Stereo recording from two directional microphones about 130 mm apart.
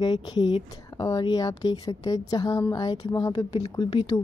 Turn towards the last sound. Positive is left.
turn(degrees=35)  # may be behind; listen again after turning